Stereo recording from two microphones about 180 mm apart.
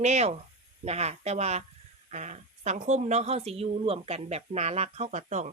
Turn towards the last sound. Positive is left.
turn(degrees=-40)  # may be behind; listen again after turning